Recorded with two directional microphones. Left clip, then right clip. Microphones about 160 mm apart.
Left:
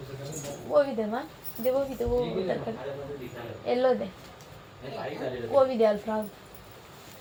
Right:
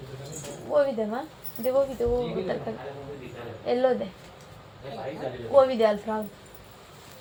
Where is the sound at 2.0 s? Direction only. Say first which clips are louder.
Right 3 dB; 40° right (ahead or behind).